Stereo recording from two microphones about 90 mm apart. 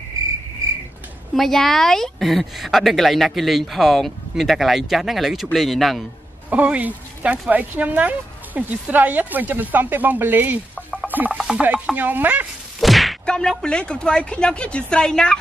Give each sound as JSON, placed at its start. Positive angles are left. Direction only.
{"t": 1.3, "sound": "a woman's voice", "side_deg": 5}
{"t": 6.5, "sound": "speech", "side_deg": -15}
{"t": 11.1, "sound": "chopping", "side_deg": -20}
{"t": 11.3, "sound": "chopping", "side_deg": -10}
{"t": 12.8, "sound": "whack", "side_deg": 0}
{"t": 13.2, "sound": "speech", "side_deg": 10}